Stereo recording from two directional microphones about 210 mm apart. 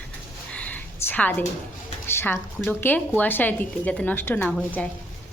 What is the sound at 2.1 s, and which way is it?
A woman's voice, 10° left (ahead or behind).